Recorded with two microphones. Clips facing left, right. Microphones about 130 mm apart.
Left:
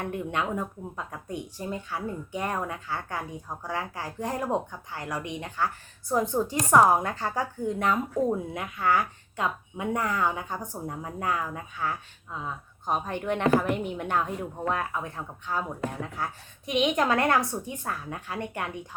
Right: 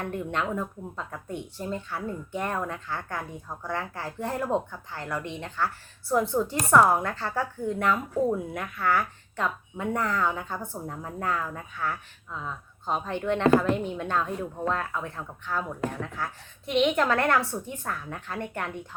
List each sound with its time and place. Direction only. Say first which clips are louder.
0.0 s speech: even; 15° left (ahead or behind)